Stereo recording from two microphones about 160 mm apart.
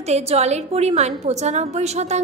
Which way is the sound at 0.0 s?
40° right (ahead or behind).